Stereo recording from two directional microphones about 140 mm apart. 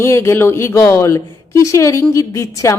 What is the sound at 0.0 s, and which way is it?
Speech, 20° left (ahead or behind).